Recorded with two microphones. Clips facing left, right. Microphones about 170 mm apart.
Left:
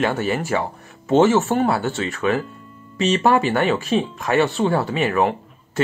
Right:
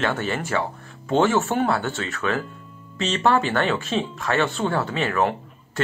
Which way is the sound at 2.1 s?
15° left (ahead or behind).